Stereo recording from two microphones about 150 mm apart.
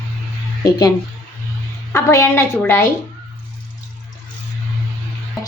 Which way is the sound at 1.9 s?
20° left (ahead or behind).